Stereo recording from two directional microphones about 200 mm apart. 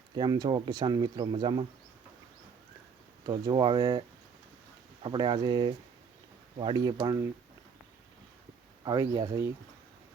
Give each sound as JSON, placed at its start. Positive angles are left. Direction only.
{"t": 0.1, "sound": "speech", "side_deg": -20}
{"t": 3.2, "sound": "speech", "side_deg": -20}
{"t": 5.0, "sound": "speech", "side_deg": -25}
{"t": 8.8, "sound": "speech", "side_deg": -20}